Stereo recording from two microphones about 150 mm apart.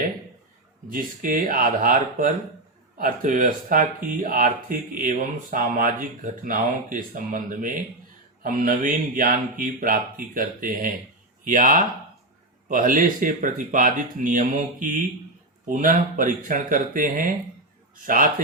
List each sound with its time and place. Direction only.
0.9 s speech: 65° right (ahead or behind)